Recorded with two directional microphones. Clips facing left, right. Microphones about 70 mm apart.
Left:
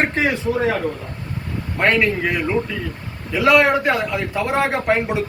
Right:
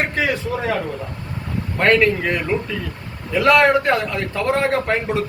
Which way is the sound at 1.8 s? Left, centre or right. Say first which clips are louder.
Right 2 dB; centre.